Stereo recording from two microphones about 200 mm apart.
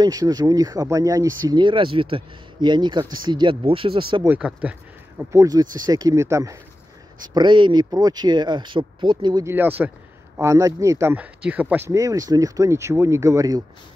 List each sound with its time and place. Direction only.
0.0 s speech: 20° right (ahead or behind)
4.1 s speech: 15° right (ahead or behind)
4.4 s speech: 5° right (ahead or behind)
5.3 s speech: 15° right (ahead or behind)